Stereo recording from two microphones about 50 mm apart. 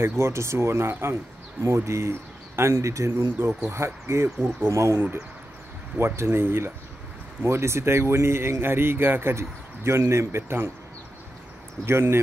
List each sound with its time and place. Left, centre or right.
0.0 s speech: right
1.6 s speech: right
3.4 s speech: right
4.6 s speech: right
5.9 s speech: right
9.3 s speech: right
11.8 s speech: right